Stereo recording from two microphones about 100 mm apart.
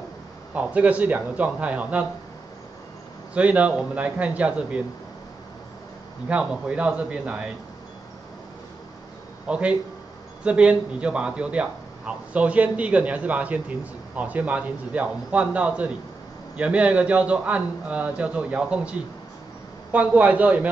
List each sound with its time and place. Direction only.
0.6 s a man's voice: 15° right (ahead or behind)
3.3 s a man's voice: 15° right (ahead or behind)
6.2 s a man's voice: 10° right (ahead or behind)
9.5 s a man's voice: 10° right (ahead or behind)